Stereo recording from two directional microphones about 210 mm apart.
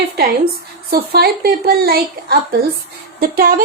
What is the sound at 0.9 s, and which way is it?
A woman's voice, 45° right (ahead or behind).